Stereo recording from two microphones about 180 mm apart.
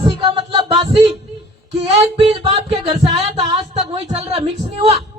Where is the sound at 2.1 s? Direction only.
30° right (ahead or behind).